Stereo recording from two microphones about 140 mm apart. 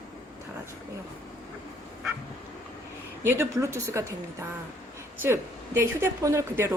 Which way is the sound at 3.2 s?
15° right (ahead or behind).